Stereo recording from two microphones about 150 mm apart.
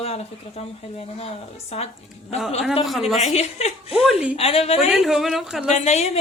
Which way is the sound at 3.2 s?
45° left (ahead or behind).